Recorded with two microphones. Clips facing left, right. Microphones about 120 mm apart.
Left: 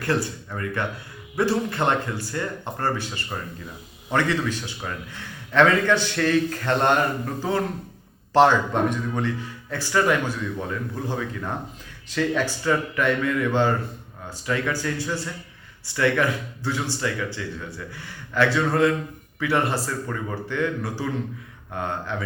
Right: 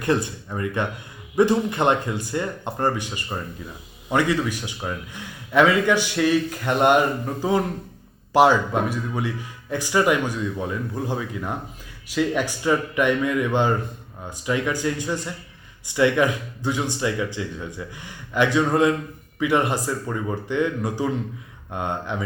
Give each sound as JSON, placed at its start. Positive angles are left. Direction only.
{"t": 0.0, "sound": "speech", "side_deg": -20}